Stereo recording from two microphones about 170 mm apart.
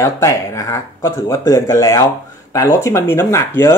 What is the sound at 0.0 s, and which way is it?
Speech, 15° left (ahead or behind).